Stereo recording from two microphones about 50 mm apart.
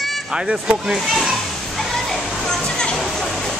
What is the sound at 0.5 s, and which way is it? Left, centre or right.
Speech, centre.